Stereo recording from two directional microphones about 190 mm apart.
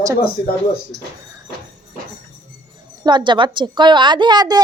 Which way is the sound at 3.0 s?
25° right (ahead or behind).